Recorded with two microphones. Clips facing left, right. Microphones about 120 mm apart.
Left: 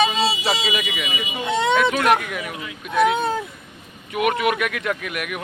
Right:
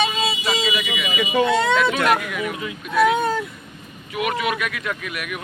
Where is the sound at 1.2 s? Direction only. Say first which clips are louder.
Right 10 dB; 90° right.